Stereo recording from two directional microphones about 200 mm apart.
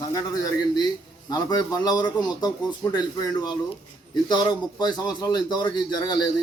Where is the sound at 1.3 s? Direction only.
20° left (ahead or behind).